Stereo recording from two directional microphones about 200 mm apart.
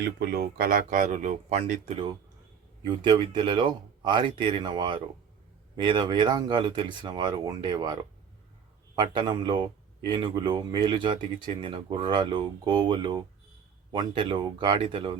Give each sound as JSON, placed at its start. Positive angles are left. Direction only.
{"t": 0.0, "sound": "speech", "side_deg": -50}
{"t": 2.8, "sound": "speech", "side_deg": -20}
{"t": 9.0, "sound": "speech", "side_deg": -20}